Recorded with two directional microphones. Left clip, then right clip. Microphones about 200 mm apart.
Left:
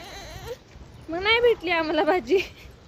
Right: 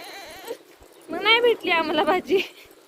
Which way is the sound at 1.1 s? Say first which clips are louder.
Right 2 dB; 5° left (ahead or behind).